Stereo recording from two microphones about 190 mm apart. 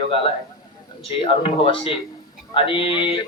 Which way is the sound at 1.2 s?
30° left (ahead or behind).